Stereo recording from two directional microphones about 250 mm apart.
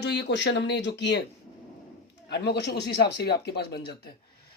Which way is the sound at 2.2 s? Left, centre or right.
Left.